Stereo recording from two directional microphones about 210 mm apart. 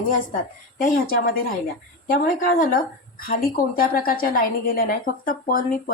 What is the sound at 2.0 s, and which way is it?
A woman's voice, 40° left (ahead or behind).